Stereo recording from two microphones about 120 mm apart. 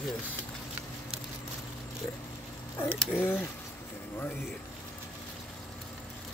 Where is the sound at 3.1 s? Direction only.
20° left (ahead or behind).